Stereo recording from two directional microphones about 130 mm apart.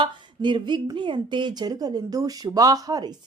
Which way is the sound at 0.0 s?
35° right (ahead or behind).